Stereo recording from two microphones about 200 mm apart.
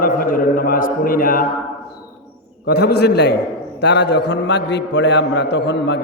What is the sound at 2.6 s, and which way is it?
A man's voice, 55° left (ahead or behind).